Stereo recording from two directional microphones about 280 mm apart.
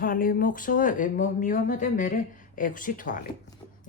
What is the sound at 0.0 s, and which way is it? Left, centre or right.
Speech, left.